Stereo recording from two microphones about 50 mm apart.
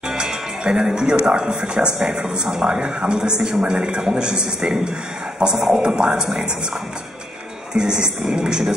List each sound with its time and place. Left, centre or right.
0.1 s a man's voice: centre
7.7 s a man's voice: centre